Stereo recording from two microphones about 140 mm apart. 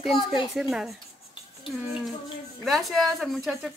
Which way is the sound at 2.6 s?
Centre (ahead or behind).